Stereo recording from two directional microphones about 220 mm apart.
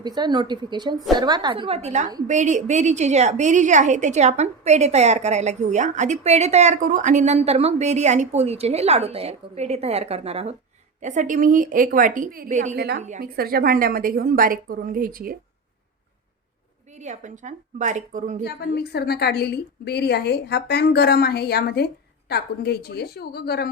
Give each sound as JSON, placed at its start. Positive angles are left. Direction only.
{"t": 0.0, "sound": "a woman's voice", "side_deg": -20}
{"t": 12.7, "sound": "a woman's voice", "side_deg": -45}
{"t": 13.0, "sound": "a woman's voice", "side_deg": -35}
{"t": 16.9, "sound": "a woman's voice", "side_deg": -30}
{"t": 18.4, "sound": "a woman's voice", "side_deg": 45}